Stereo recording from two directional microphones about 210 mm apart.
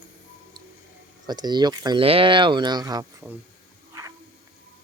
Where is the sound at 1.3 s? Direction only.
20° right (ahead or behind).